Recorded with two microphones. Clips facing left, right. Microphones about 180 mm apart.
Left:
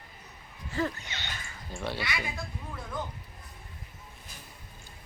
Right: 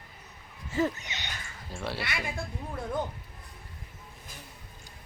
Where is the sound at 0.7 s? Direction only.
20° right (ahead or behind).